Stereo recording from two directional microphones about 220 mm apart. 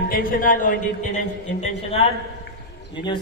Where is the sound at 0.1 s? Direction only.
40° left (ahead or behind).